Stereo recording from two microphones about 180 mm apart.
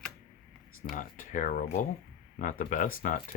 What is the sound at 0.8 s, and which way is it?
Speech, 45° left (ahead or behind).